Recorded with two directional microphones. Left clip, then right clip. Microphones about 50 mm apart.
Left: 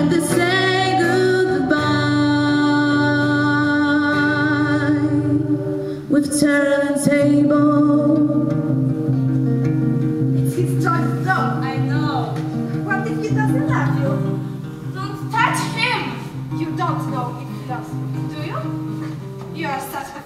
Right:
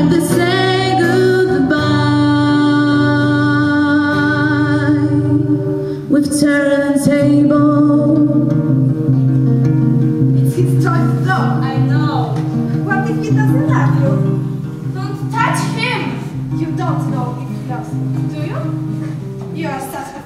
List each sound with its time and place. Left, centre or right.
0.0 s music: centre
10.4 s music: centre
15.3 s music: left